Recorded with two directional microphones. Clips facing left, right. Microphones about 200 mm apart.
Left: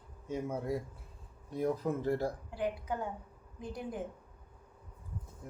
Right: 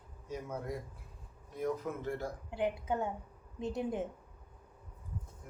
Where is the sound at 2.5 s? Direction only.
25° right (ahead or behind).